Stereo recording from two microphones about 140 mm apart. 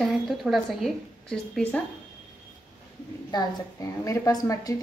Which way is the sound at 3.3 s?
25° left (ahead or behind).